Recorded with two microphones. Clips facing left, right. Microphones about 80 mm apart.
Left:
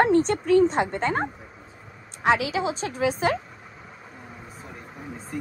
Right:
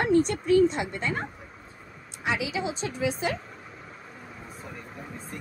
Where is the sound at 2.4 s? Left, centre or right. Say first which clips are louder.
Left 4 dB; centre.